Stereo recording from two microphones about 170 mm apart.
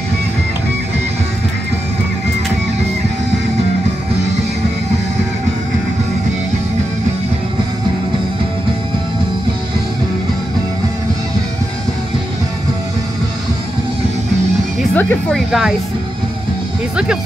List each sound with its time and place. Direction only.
15.0 s speech: 10° left (ahead or behind)
15.3 s speech: centre (ahead or behind)